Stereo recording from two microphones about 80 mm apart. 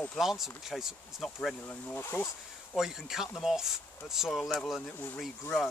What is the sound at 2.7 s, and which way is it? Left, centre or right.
Speech, centre.